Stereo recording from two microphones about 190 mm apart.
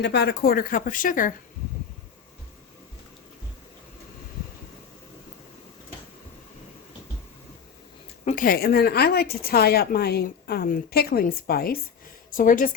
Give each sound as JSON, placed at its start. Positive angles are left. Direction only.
{"t": 0.0, "sound": "speech", "side_deg": 60}
{"t": 8.2, "sound": "a woman's voice", "side_deg": 40}